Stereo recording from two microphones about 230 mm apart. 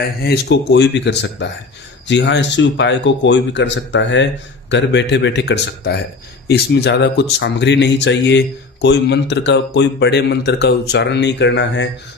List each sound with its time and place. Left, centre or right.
0.2 s speech: left